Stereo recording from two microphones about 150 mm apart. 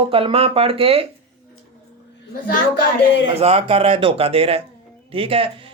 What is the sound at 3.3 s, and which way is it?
A man's voice, 40° right (ahead or behind).